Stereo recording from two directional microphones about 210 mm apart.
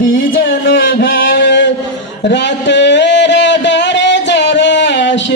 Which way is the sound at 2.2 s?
55° left (ahead or behind).